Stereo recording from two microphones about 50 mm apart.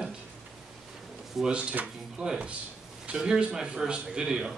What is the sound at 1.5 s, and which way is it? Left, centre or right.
Speech, right.